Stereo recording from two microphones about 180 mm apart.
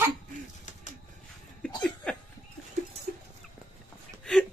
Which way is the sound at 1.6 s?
5° left (ahead or behind).